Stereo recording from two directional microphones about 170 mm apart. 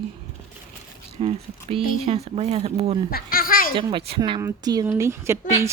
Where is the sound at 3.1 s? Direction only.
60° left (ahead or behind).